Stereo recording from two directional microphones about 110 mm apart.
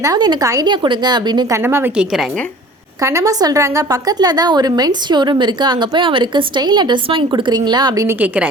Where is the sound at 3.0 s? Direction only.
30° right (ahead or behind).